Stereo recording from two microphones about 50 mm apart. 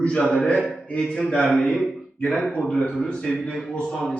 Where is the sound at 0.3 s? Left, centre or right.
Centre.